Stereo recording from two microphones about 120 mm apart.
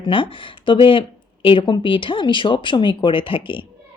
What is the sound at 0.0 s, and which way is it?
A woman's voice, 45° left (ahead or behind).